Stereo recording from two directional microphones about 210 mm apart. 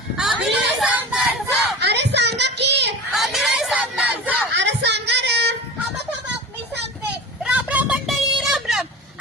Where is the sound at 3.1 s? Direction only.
Centre (ahead or behind).